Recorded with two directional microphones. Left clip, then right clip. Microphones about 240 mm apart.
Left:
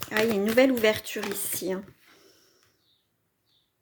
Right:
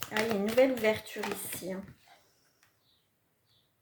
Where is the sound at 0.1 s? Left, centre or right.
Left.